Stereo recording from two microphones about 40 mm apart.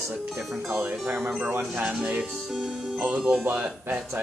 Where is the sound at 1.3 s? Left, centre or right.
Right.